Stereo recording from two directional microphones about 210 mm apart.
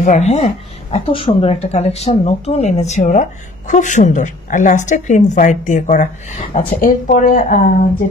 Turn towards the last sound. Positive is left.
turn(degrees=35)  # may be behind; listen again after turning